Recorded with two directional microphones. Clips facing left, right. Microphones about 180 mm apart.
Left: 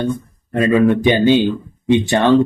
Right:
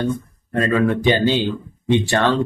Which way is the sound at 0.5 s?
10° left (ahead or behind).